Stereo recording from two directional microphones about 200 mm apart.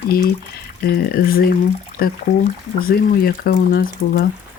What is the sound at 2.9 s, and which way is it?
Speech, 50° left (ahead or behind).